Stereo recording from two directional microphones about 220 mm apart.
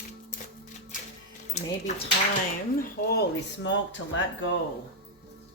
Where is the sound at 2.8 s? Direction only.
45° left (ahead or behind).